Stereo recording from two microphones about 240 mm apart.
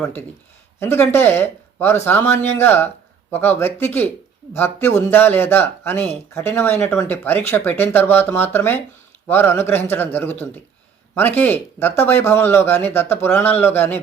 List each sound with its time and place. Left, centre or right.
0.8 s speech: centre